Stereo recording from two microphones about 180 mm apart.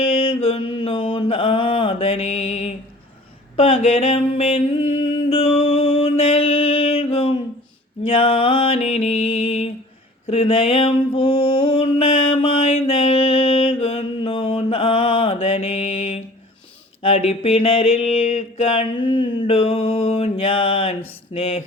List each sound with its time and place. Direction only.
0.0 s mantra: 30° left (ahead or behind)
3.5 s a sound: 35° left (ahead or behind)
8.0 s mantra: 30° left (ahead or behind)
10.2 s music: 35° left (ahead or behind)
17.0 s mantra: 35° left (ahead or behind)